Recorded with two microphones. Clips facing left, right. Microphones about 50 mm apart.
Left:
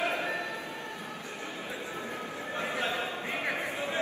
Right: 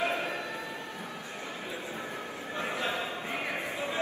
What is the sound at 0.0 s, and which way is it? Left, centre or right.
Bow-wow, left.